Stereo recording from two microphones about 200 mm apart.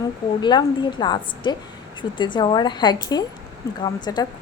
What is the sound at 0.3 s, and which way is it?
A woman's voice, 20° left (ahead or behind).